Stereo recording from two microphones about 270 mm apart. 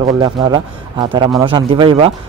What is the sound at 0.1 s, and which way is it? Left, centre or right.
A man's voice, centre.